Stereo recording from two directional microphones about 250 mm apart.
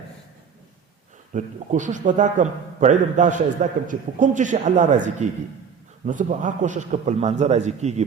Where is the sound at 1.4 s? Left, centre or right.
Right.